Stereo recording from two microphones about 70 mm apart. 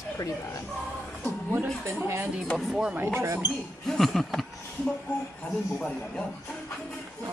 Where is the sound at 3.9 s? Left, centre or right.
Centre.